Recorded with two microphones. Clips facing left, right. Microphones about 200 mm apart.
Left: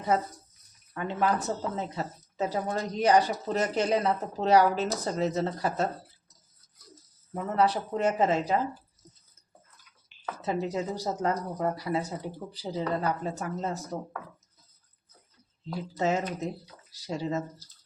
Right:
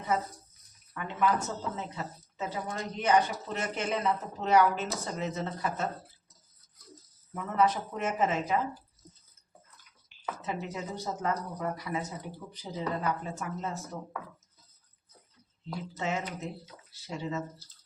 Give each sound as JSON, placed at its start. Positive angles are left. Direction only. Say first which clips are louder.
{"t": 0.9, "sound": "a woman's voice", "louder": "left 1 dB", "side_deg": 35}
{"t": 7.3, "sound": "a woman's voice", "louder": "left 2 dB", "side_deg": 35}
{"t": 10.4, "sound": "a woman's voice", "louder": "left 8 dB", "side_deg": 35}
{"t": 15.6, "sound": "a woman's voice", "louder": "left 6 dB", "side_deg": 40}